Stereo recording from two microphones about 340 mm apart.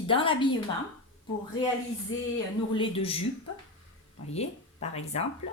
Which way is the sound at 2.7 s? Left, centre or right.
Centre.